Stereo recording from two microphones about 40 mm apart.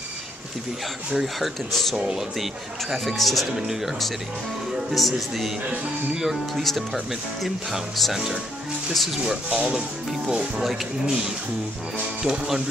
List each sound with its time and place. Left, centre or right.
1.1 s speech: centre
2.0 s speech: centre
2.3 s speech: centre
3.5 s speech: centre
4.9 s speech: centre
6.6 s speech: centre
9.1 s speech: centre
9.5 s speech: right
10.6 s speech: centre
12.2 s speech: centre